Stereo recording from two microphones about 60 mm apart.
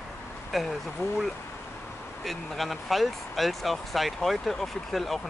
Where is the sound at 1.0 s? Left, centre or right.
Left.